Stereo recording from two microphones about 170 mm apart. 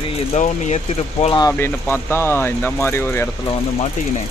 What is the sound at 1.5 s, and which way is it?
Speech, 15° left (ahead or behind).